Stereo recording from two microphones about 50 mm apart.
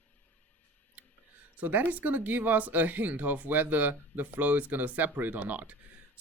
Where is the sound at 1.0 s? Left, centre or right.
Right.